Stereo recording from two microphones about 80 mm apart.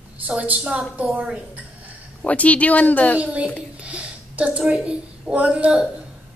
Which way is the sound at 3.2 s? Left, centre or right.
Centre.